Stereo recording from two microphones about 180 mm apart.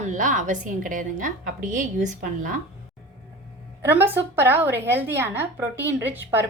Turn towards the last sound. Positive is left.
turn(degrees=-10)  # may be behind; listen again after turning